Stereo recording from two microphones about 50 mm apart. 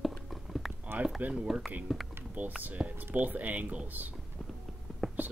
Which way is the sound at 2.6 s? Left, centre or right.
Right.